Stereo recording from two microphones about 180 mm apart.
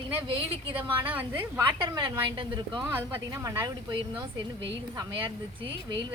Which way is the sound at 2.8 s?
15° right (ahead or behind).